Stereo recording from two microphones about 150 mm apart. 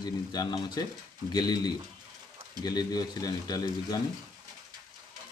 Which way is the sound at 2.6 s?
25° left (ahead or behind).